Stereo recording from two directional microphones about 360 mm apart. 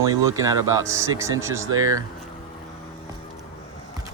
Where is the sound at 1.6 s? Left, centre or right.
Right.